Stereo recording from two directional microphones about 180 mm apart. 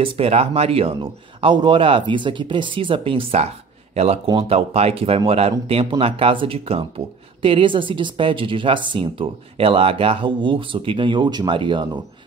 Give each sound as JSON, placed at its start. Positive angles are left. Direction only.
{"t": 0.0, "sound": "speech", "side_deg": -30}